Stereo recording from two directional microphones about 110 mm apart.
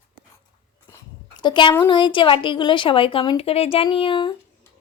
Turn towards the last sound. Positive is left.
turn(degrees=50)  # may be behind; listen again after turning